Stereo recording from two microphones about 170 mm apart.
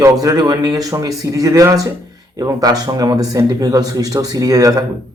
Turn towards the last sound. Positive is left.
turn(degrees=-20)  # may be behind; listen again after turning